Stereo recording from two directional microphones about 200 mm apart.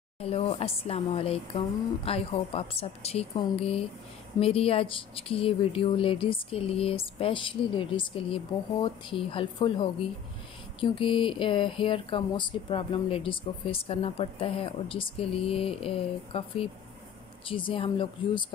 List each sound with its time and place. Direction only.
0.2 s speech: 30° left (ahead or behind)